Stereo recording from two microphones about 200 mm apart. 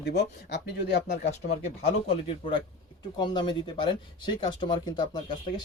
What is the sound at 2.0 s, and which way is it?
Speech, 25° left (ahead or behind).